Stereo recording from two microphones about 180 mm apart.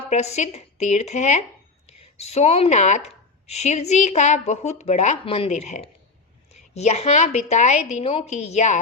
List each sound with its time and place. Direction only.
0.1 s a woman's voice: 35° left (ahead or behind)